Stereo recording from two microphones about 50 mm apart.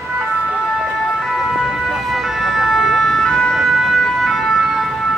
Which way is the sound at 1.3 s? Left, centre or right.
Centre.